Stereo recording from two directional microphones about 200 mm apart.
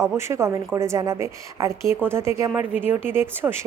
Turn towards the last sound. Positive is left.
turn(degrees=-10)  # may be behind; listen again after turning